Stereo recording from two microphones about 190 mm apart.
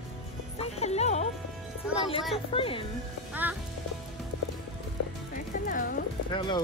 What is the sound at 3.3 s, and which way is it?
Music, 10° right (ahead or behind).